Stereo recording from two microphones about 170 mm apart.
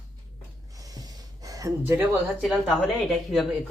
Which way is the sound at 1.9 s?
10° right (ahead or behind).